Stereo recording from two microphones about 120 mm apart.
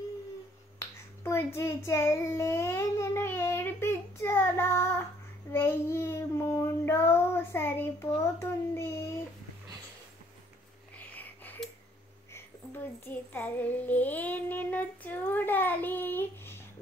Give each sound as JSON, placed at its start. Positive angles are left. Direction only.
{"t": 0.7, "sound": "child singing", "side_deg": 20}
{"t": 11.1, "sound": "a sound", "side_deg": 15}
{"t": 12.4, "sound": "child singing", "side_deg": 20}